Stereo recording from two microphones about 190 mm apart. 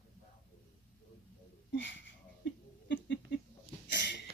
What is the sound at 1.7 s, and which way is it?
Speech, 70° left (ahead or behind).